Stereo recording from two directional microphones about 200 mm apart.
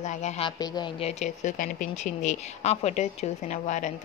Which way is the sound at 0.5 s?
20° left (ahead or behind).